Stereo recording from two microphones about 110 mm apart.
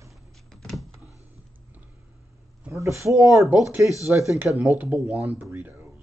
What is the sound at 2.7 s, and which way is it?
Speech, 25° right (ahead or behind).